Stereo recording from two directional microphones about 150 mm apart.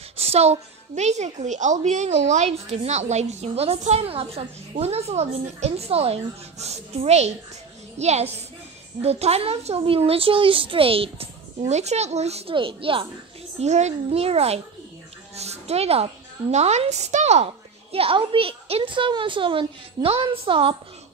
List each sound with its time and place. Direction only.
0.2 s a woman's voice: 45° right (ahead or behind)
13.6 s a woman's voice: 50° right (ahead or behind)
17.9 s a woman's voice: 40° right (ahead or behind)